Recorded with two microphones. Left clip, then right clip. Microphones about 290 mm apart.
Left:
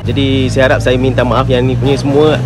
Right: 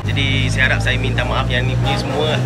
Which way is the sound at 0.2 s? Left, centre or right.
Centre.